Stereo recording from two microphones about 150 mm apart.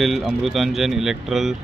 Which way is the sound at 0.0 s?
Centre (ahead or behind).